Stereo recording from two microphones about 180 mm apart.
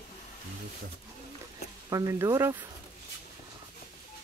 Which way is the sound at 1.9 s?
20° right (ahead or behind).